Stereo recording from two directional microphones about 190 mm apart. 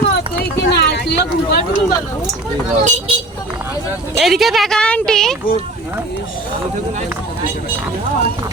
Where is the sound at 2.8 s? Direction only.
40° right (ahead or behind).